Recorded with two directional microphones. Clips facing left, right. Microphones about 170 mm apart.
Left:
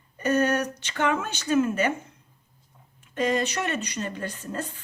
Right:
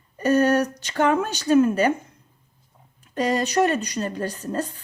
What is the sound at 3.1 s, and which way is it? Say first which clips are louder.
Speech: right 4 dB; 35° right (ahead or behind).